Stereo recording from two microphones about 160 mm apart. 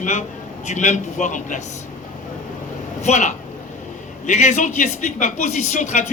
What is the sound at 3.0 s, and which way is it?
A man's voice, 45° left (ahead or behind).